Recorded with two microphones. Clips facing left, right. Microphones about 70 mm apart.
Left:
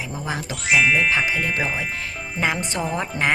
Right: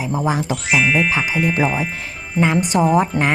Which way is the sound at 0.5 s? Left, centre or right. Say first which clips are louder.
Left 2 dB; centre.